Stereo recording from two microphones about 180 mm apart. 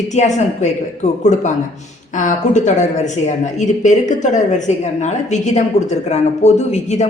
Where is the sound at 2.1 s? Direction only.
45° left (ahead or behind).